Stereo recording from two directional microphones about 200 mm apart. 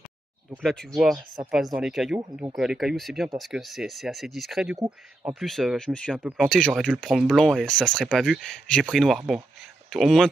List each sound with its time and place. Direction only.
0.7 s speech: centre (ahead or behind)
1.1 s speech: 20° right (ahead or behind)
1.8 s speech: centre (ahead or behind)